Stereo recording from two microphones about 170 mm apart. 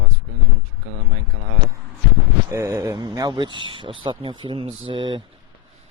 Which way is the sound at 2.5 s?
15° right (ahead or behind).